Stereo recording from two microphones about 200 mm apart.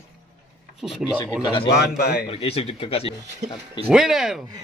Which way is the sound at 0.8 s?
Centre (ahead or behind).